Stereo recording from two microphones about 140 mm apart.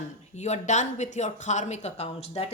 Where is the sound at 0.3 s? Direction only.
55° left (ahead or behind).